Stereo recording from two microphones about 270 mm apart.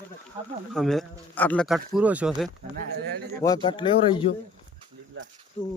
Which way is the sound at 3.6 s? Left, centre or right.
Centre.